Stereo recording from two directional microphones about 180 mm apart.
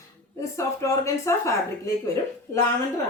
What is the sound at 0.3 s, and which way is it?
Speech, 15° left (ahead or behind).